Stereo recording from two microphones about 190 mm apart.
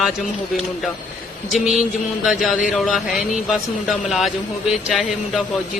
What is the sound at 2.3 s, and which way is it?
Speech, centre (ahead or behind).